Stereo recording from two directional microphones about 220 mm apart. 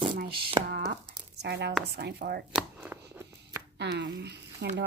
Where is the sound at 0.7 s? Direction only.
45° right (ahead or behind).